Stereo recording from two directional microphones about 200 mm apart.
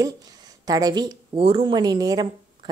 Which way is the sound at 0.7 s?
20° right (ahead or behind).